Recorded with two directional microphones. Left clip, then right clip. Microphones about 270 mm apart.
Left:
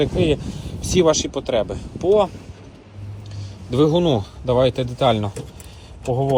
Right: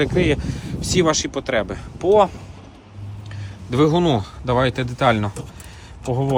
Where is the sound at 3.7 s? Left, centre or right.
Centre.